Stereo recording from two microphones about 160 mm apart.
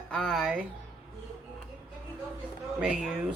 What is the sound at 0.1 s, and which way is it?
Speech, 5° left (ahead or behind).